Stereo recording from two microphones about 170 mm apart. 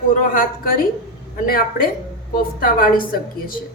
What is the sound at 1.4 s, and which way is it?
A woman's voice, 60° left (ahead or behind).